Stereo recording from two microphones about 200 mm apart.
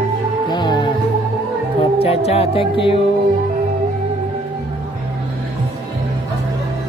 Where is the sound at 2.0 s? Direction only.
30° left (ahead or behind).